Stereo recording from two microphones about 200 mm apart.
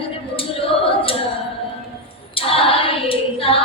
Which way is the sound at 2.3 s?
30° left (ahead or behind).